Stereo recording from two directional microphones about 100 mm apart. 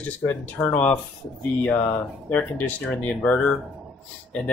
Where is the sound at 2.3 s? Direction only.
15° left (ahead or behind).